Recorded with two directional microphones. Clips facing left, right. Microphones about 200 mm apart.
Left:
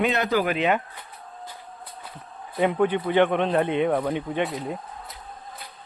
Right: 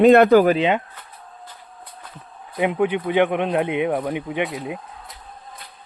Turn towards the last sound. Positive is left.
turn(degrees=-5)  # may be behind; listen again after turning